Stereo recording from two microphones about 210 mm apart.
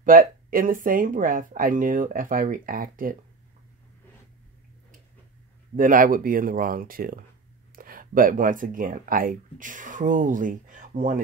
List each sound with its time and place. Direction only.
0.0 s speech: 40° right (ahead or behind)
5.8 s speech: 40° right (ahead or behind)